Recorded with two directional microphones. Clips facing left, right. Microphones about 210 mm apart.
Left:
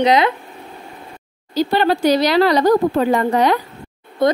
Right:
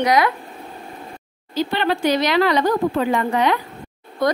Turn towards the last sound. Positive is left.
turn(degrees=25)  # may be behind; listen again after turning